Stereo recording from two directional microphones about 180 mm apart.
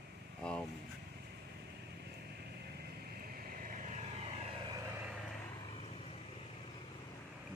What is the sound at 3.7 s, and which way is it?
Vehicle, 45° right (ahead or behind).